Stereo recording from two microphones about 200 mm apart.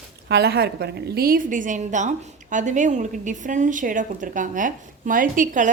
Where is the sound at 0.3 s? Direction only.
55° right (ahead or behind).